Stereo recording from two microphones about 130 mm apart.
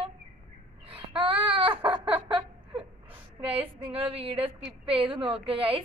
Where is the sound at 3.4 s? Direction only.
45° right (ahead or behind).